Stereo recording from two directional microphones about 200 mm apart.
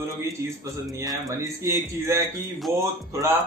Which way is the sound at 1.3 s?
15° right (ahead or behind).